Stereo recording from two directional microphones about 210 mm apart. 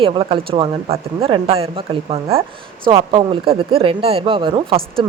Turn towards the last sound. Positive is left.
turn(degrees=-25)  # may be behind; listen again after turning